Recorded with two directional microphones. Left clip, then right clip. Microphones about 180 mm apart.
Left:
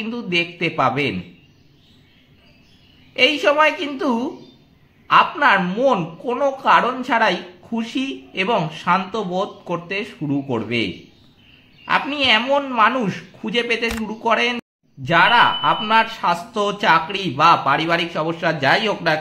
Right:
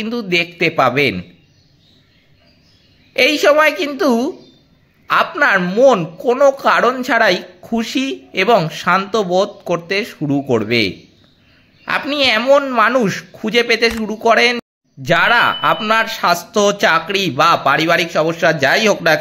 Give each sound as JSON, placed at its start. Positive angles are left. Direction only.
{"t": 0.0, "sound": "speech", "side_deg": -30}
{"t": 3.1, "sound": "speech", "side_deg": -30}